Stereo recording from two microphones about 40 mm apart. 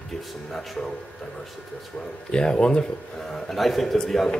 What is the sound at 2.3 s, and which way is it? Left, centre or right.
Speech, left.